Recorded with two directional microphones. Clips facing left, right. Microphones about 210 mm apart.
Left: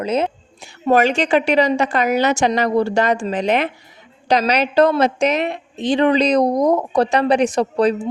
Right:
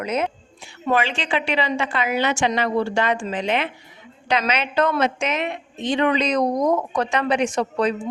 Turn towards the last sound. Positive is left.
turn(degrees=35)  # may be behind; listen again after turning